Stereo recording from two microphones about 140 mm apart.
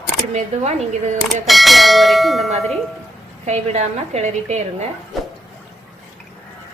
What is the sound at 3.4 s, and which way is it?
A woman's voice, 55° right (ahead or behind).